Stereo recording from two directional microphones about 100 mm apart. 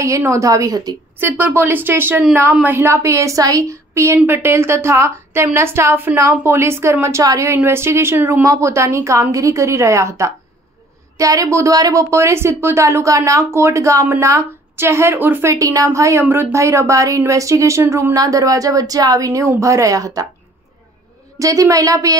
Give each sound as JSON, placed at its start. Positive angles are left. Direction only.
{"t": 0.0, "sound": "speech", "side_deg": -30}
{"t": 1.4, "sound": "a woman's voice", "side_deg": -20}
{"t": 15.5, "sound": "speech", "side_deg": -35}
{"t": 21.4, "sound": "speech", "side_deg": -35}